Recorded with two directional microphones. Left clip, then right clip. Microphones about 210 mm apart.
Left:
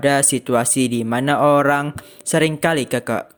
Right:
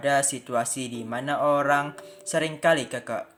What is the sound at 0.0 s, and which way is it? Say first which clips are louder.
Speech: left 7 dB; 45° left (ahead or behind).